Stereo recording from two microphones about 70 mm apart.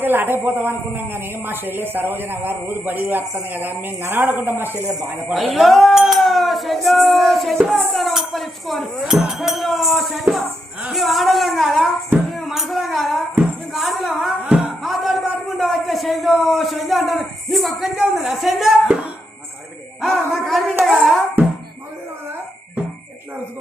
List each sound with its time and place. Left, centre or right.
0.0 s a woman's voice: right
5.3 s speech: centre
12.3 s a sound: centre
20.0 s speech: centre